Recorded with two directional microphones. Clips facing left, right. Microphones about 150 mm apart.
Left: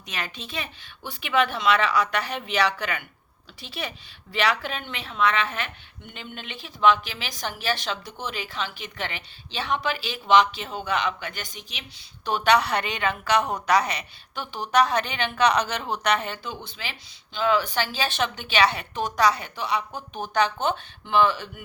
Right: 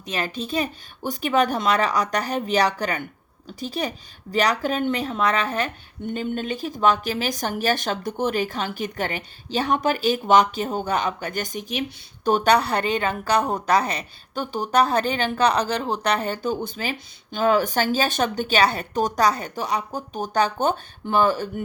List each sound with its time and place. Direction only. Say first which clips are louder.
0.0 s a woman's voice: right 7 dB; 35° right (ahead or behind)